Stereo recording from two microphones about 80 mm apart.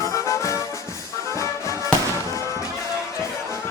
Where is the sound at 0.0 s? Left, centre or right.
Left.